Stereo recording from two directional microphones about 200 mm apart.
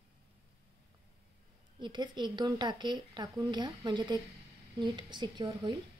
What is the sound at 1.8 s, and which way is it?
Speech, 25° right (ahead or behind).